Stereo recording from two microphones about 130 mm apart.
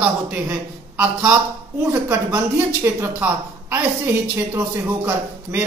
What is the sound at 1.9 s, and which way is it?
Speech, 30° right (ahead or behind).